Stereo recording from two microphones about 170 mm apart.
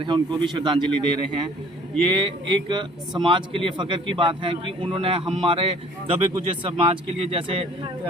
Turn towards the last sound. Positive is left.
turn(degrees=-30)  # may be behind; listen again after turning